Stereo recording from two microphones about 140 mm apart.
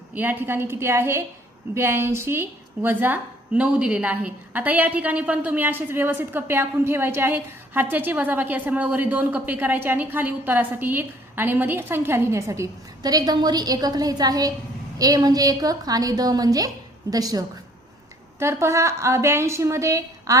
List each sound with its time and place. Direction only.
0.1 s a woman's voice: 15° right (ahead or behind)